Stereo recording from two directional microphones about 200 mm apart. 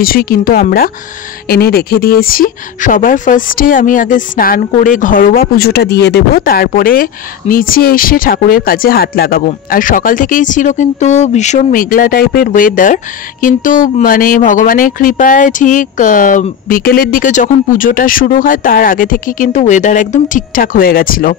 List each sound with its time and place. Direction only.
0.0 s speech: 45° left (ahead or behind)